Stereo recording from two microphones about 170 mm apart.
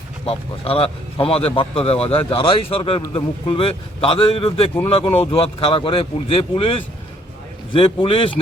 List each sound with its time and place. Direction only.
0.3 s a man's voice: 35° left (ahead or behind)